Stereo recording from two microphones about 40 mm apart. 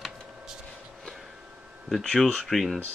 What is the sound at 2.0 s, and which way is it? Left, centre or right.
Speech, centre.